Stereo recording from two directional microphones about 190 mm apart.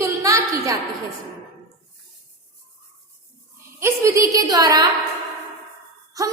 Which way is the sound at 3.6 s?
15° right (ahead or behind).